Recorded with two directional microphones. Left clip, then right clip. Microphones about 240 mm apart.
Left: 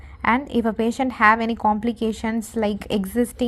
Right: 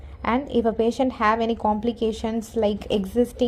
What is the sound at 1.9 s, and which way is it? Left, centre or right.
Speech, left.